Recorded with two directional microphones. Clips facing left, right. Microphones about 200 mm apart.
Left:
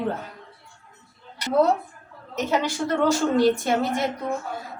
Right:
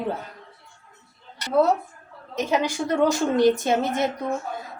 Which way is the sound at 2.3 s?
15° right (ahead or behind).